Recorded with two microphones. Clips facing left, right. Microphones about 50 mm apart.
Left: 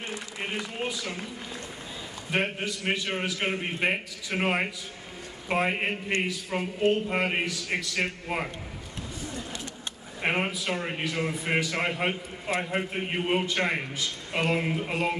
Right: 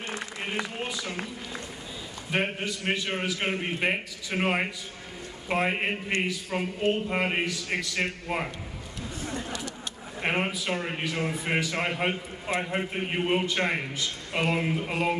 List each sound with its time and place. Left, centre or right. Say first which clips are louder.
0.7 s speech: left 1 dB; centre
2.3 s a man's voice: even; centre
9.2 s chatter: right 4 dB; right
10.2 s a man's voice: even; centre